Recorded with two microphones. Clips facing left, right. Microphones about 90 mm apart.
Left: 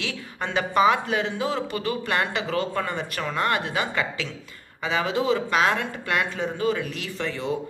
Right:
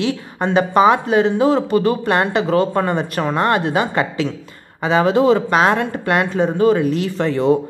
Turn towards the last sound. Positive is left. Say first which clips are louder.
# right 12 dB
turn(degrees=-40)  # may be behind; listen again after turning